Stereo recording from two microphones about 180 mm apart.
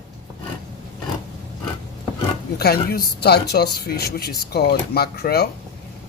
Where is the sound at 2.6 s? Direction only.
60° left (ahead or behind).